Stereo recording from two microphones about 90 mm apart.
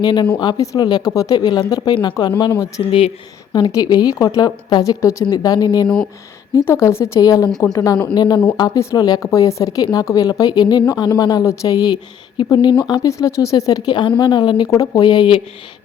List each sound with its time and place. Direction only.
0.0 s speech: 55° left (ahead or behind)
2.8 s speech: 60° left (ahead or behind)
3.5 s speech: 50° left (ahead or behind)
6.7 s speech: 30° left (ahead or behind)
7.2 s speech: 45° left (ahead or behind)
8.1 s speech: 55° left (ahead or behind)
8.8 s speech: 35° left (ahead or behind)
12.4 s speech: 60° left (ahead or behind)
13.1 s speech: 35° left (ahead or behind); by 14.7 s 55° left (ahead or behind)
14.7 s speech: 40° left (ahead or behind)
15.0 s speech: 55° left (ahead or behind)